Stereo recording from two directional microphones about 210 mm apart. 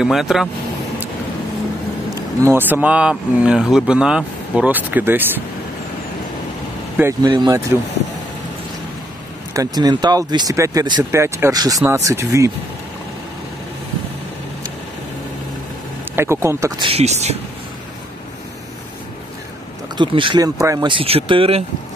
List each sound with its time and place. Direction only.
0.0 s speech: centre (ahead or behind)
2.0 s speech: 10° right (ahead or behind)
7.0 s speech: 15° right (ahead or behind)
9.5 s speech: 15° right (ahead or behind)
16.2 s speech: 10° right (ahead or behind); by 17.4 s 30° right (ahead or behind)
20.0 s speech: 20° right (ahead or behind)